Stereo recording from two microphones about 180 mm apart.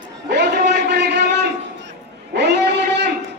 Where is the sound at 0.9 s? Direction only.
70° right (ahead or behind).